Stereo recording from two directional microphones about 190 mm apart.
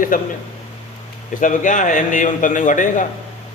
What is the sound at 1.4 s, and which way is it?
A man's voice, 45° left (ahead or behind).